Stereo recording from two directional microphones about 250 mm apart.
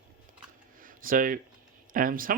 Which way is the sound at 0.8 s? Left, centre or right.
Right.